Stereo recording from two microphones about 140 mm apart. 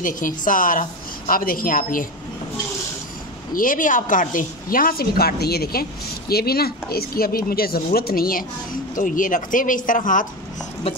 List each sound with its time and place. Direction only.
0.0 s a woman's voice: 75° left (ahead or behind)
3.5 s a woman's voice: 75° left (ahead or behind); by 8.5 s 90° left
8.9 s speech: 75° left (ahead or behind)